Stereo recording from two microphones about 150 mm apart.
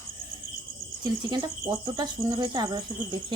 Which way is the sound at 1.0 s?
30° right (ahead or behind).